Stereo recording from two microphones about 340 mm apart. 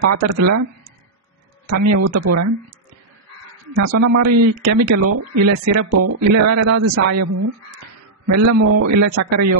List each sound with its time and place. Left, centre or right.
0.0 s speech: right
1.7 s speech: right
3.7 s speech: right